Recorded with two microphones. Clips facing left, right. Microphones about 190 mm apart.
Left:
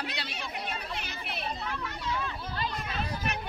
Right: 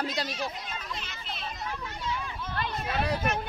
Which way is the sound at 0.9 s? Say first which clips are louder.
Left 2 dB; 60° left (ahead or behind).